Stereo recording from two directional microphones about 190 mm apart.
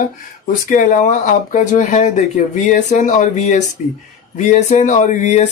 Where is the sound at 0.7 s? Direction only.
40° left (ahead or behind).